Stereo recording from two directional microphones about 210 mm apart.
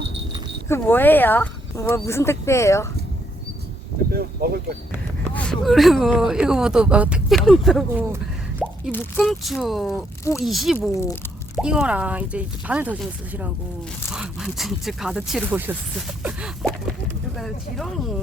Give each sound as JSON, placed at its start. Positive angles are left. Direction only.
{"t": 0.7, "sound": "speech", "side_deg": 10}
{"t": 4.1, "sound": "speech", "side_deg": -45}
{"t": 5.3, "sound": "speech", "side_deg": 5}
{"t": 10.8, "sound": "speech", "side_deg": 10}
{"t": 11.5, "sound": "speech", "side_deg": -5}